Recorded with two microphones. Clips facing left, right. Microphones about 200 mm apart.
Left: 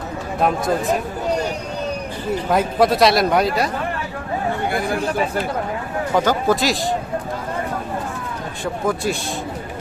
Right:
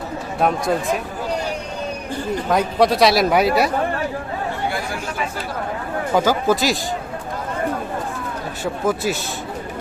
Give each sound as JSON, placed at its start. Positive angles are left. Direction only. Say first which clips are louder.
{"t": 0.4, "sound": "a man's voice", "louder": "even", "side_deg": 0}
{"t": 2.5, "sound": "a man's voice", "louder": "even", "side_deg": 0}
{"t": 4.7, "sound": "chatter", "louder": "left 4 dB", "side_deg": 55}
{"t": 6.1, "sound": "a man's voice", "louder": "even", "side_deg": -5}
{"t": 8.6, "sound": "a man's voice", "louder": "right 1 dB", "side_deg": -5}